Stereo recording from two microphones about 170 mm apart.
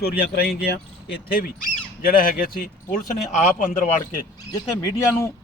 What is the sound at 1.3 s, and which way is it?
Speech, 55° left (ahead or behind).